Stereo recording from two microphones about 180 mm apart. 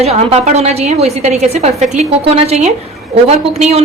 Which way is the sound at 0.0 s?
35° right (ahead or behind).